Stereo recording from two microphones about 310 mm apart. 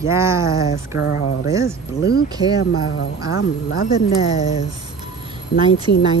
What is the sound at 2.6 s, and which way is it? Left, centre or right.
Speech, left.